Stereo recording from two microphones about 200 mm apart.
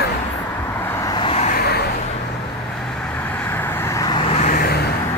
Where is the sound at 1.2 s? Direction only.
30° left (ahead or behind).